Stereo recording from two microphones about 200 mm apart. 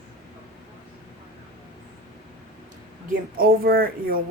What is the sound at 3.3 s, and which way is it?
Speech, 45° right (ahead or behind).